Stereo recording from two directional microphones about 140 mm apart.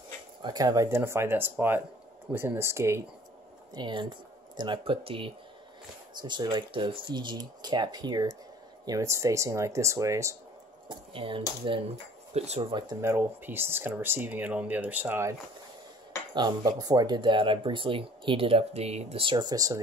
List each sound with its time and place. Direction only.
0.4 s speech: 30° right (ahead or behind)
3.7 s speech: 35° right (ahead or behind)
10.9 s speech: 40° right (ahead or behind)
12.4 s speech: 45° right (ahead or behind)
13.0 s speech: 15° right (ahead or behind)
16.3 s speech: 30° right (ahead or behind); by 19.3 s 45° right (ahead or behind)
19.3 s speech: 30° right (ahead or behind)